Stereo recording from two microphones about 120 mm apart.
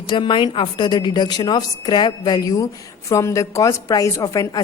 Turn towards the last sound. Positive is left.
turn(degrees=30)  # may be behind; listen again after turning